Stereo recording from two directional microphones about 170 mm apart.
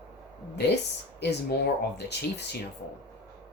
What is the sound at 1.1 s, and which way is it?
Speech, 85° left.